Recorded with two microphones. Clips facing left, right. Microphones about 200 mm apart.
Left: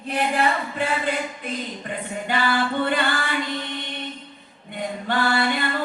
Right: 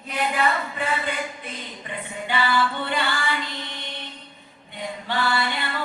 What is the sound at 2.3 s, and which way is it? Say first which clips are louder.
Female singing: left 1 dB; 45° left (ahead or behind).